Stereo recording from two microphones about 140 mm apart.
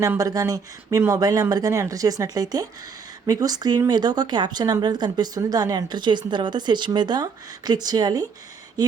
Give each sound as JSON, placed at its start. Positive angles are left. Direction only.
{"t": 0.2, "sound": "speech", "side_deg": -25}